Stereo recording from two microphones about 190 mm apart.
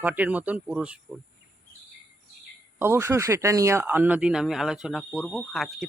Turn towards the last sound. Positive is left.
turn(degrees=0)  # may be behind; listen again after turning